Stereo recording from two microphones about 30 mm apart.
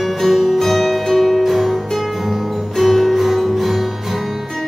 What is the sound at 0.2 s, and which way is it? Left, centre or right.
Music, centre.